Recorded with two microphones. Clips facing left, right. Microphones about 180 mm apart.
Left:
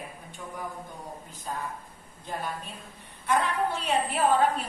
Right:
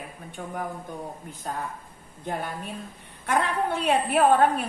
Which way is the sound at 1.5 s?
65° right (ahead or behind).